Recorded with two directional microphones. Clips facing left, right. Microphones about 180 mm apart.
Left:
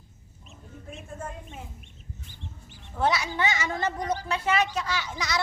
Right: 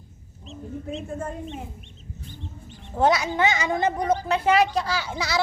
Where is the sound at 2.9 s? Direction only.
25° right (ahead or behind).